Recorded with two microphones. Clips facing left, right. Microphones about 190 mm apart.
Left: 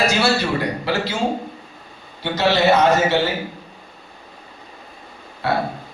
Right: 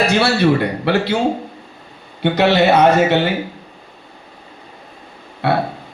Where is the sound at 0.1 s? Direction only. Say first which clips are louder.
Right 5 dB; 60° right (ahead or behind).